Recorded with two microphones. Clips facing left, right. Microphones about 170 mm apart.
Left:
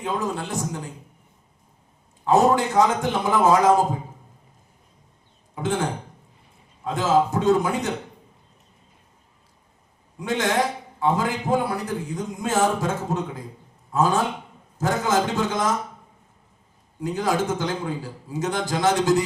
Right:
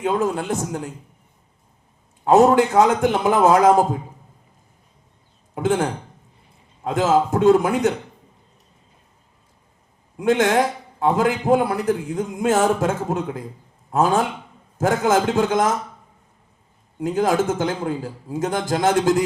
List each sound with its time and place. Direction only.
0.0 s a man's voice: 50° right (ahead or behind)
2.2 s a man's voice: 55° right (ahead or behind)
5.5 s a man's voice: 55° right (ahead or behind)
10.2 s a man's voice: 55° right (ahead or behind)
17.0 s a man's voice: 50° right (ahead or behind)